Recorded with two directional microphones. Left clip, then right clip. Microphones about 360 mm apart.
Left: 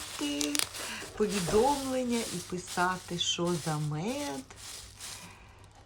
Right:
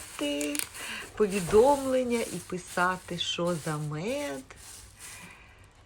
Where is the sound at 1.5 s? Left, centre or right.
Centre.